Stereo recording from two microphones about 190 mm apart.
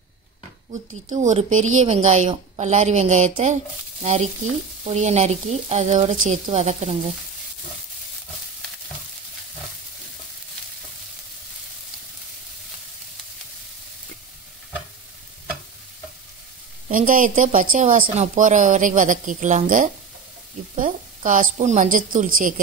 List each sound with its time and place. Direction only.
1.0 s speech: 40° right (ahead or behind)
16.9 s speech: 45° right (ahead or behind)